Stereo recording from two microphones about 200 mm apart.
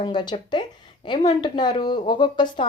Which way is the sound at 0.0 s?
20° left (ahead or behind).